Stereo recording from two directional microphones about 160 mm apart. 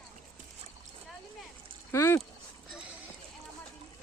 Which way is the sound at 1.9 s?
15° left (ahead or behind).